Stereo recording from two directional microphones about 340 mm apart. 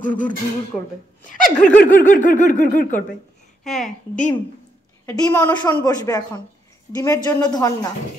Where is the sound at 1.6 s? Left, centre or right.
Left.